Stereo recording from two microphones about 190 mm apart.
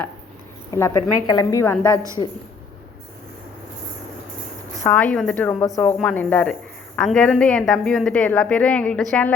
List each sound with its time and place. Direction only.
0.7 s a woman's voice: 15° left (ahead or behind)
4.8 s a woman's voice: 5° left (ahead or behind)